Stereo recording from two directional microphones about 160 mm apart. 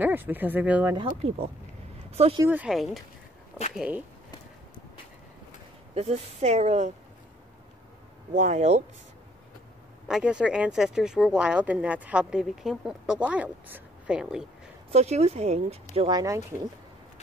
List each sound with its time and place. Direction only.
0.0 s speech: 10° right (ahead or behind)
0.9 s speech: 35° right (ahead or behind)
2.0 s a sound: 40° right (ahead or behind)
2.4 s speech: 10° right (ahead or behind)
5.9 s a woman's voice: 40° right (ahead or behind)
8.4 s a woman's voice: 45° right (ahead or behind)
10.0 s speech: 5° right (ahead or behind)
14.9 s speech: 40° right (ahead or behind)
16.1 s speech: 20° right (ahead or behind)